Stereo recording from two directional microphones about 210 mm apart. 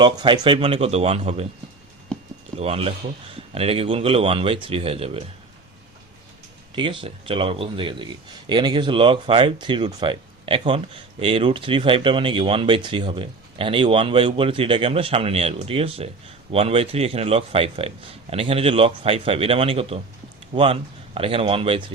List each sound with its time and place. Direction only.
0.0 s speech: 25° right (ahead or behind)
2.6 s speech: 30° right (ahead or behind)
6.7 s speech: 25° right (ahead or behind)